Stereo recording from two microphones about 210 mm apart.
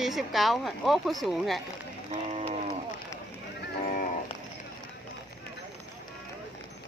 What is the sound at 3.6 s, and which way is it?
Livestock, 40° left (ahead or behind).